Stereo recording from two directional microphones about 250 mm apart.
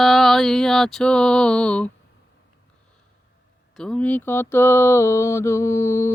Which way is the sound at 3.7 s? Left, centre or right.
Centre.